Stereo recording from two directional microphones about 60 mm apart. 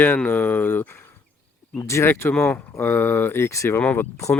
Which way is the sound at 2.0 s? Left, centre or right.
Left.